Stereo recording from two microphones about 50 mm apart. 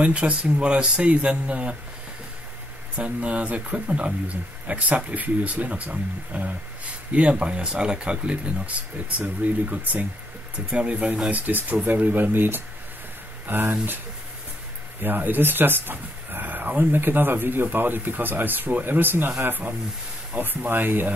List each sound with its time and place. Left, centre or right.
0.0 s speech: right
3.0 s speech: right
10.7 s speech: right
15.0 s speech: right